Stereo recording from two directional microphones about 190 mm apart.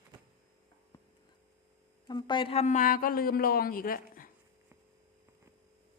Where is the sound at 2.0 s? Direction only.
20° left (ahead or behind); by 4.3 s 50° left (ahead or behind).